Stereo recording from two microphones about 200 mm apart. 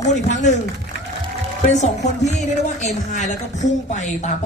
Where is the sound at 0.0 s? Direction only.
35° left (ahead or behind).